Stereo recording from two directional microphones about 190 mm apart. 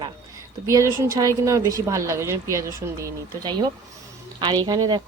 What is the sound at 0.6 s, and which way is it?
Speech, 15° right (ahead or behind).